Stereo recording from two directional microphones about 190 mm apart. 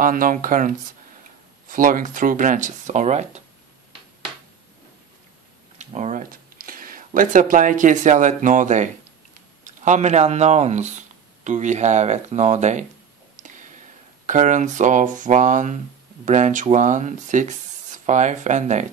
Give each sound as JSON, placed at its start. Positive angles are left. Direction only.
{"t": 0.0, "sound": "speech", "side_deg": -45}
{"t": 5.8, "sound": "speech", "side_deg": -40}
{"t": 13.4, "sound": "a sound", "side_deg": -40}
{"t": 14.2, "sound": "speech", "side_deg": -40}